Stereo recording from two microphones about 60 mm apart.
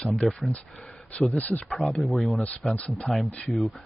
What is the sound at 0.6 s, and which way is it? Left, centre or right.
Speech, left.